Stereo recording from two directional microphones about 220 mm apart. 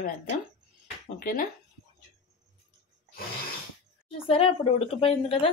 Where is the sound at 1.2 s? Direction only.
40° left (ahead or behind).